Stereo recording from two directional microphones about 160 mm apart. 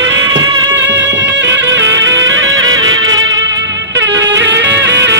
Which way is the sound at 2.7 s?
25° right (ahead or behind).